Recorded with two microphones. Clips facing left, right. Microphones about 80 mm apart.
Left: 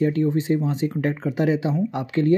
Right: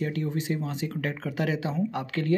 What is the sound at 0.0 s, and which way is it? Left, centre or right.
Speech, left.